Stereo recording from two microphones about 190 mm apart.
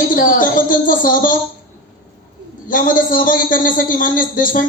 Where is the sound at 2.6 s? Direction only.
45° left (ahead or behind).